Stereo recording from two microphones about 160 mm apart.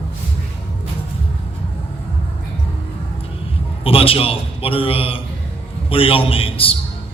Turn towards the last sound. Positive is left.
turn(degrees=35)  # may be behind; listen again after turning